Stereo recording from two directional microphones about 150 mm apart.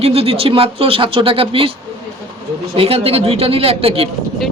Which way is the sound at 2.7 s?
40° right (ahead or behind).